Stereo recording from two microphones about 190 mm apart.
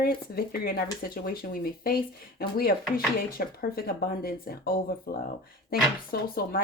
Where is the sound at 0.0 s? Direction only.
50° left (ahead or behind).